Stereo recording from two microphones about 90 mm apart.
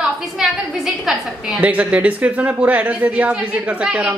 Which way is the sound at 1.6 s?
15° right (ahead or behind).